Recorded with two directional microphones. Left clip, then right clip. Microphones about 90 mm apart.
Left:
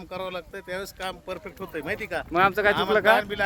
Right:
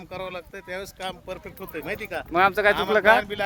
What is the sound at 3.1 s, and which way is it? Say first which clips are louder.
Speech: right 1 dB; 15° left (ahead or behind).